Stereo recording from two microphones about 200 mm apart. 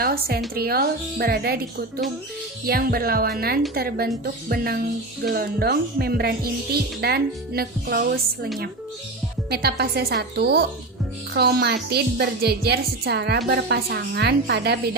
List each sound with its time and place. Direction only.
0.0 s speech: 50° right (ahead or behind)
2.6 s speech: 50° right (ahead or behind)
9.5 s a woman's voice: 50° right (ahead or behind)